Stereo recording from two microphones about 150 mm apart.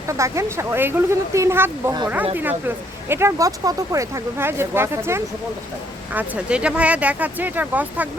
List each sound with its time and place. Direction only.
0.1 s speech: 20° right (ahead or behind)